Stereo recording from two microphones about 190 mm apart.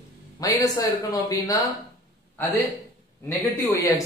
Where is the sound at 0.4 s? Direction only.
20° left (ahead or behind).